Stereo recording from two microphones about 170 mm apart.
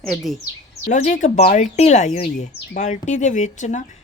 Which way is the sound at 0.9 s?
45° left (ahead or behind).